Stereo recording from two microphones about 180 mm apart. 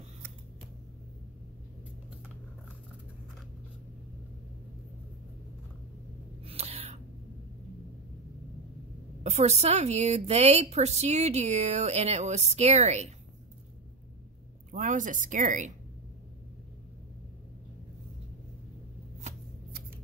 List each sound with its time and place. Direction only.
6.4 s a sound: 35° right (ahead or behind)
9.2 s a woman's voice: 35° right (ahead or behind)
14.7 s speech: 45° right (ahead or behind)